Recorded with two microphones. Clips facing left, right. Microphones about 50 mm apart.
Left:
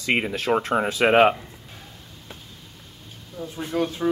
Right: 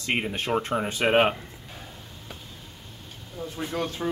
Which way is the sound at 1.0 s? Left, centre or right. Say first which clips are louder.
Left 5 dB; left.